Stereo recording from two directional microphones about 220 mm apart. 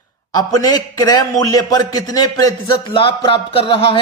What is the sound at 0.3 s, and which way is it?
A man's voice, 15° left (ahead or behind).